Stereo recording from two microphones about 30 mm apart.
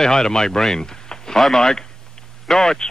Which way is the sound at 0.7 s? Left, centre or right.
Left.